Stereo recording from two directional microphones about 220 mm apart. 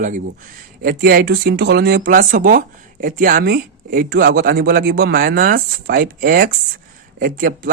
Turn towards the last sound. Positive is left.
turn(degrees=-40)  # may be behind; listen again after turning